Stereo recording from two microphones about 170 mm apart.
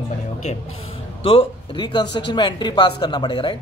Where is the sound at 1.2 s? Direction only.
30° left (ahead or behind).